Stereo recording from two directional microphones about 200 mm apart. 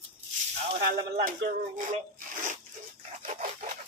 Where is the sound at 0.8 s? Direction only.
45° right (ahead or behind).